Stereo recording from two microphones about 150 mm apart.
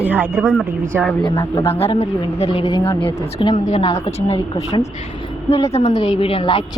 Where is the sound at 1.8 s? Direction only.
40° left (ahead or behind).